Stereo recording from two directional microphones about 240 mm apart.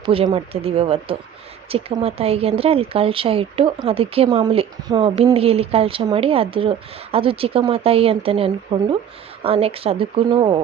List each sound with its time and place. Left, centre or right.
0.0 s speech: right